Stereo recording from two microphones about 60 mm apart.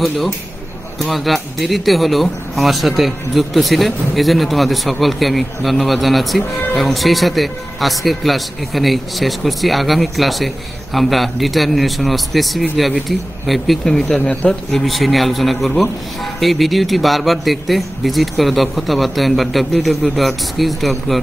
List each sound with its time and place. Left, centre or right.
0.9 s speech: centre
14.0 s speech: centre
14.7 s speech: centre